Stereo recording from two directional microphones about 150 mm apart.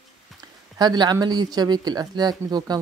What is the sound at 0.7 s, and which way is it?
Speech, 30° right (ahead or behind).